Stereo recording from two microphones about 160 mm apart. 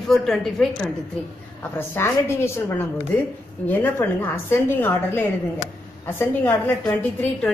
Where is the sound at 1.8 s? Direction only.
15° left (ahead or behind).